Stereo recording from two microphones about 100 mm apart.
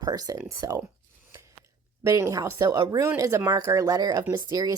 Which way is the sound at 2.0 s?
30° right (ahead or behind).